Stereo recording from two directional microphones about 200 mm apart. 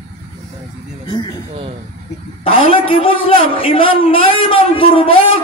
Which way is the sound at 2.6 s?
25° left (ahead or behind).